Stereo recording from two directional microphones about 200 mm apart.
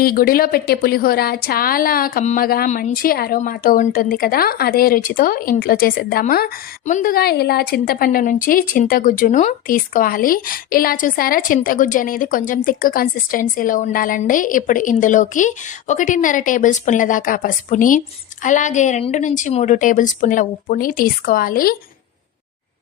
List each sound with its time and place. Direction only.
0.0 s a woman's voice: 45° left (ahead or behind)